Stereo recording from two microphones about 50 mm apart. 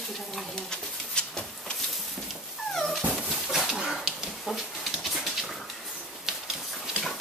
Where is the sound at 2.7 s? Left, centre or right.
Centre.